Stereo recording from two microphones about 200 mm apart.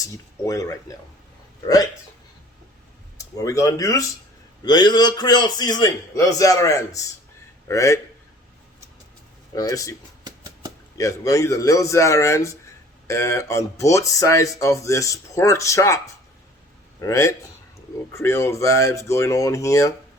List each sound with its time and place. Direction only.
0.0 s speech: 15° left (ahead or behind)
3.2 s a man's voice: 15° left (ahead or behind)
9.6 s speech: 15° left (ahead or behind)
10.2 s a sound: 20° right (ahead or behind)
10.9 s speech: 15° left (ahead or behind)
17.0 s speech: 15° left (ahead or behind)